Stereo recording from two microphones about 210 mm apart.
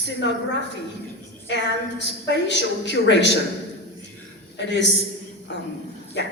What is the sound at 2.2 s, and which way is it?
A man's voice, 55° left (ahead or behind).